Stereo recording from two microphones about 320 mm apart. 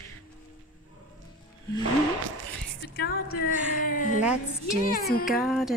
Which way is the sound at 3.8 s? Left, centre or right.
Left.